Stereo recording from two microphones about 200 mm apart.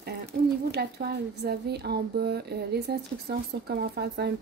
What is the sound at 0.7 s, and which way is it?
A woman's voice, 55° right (ahead or behind).